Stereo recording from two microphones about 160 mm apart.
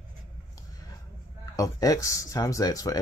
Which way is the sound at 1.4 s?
20° left (ahead or behind).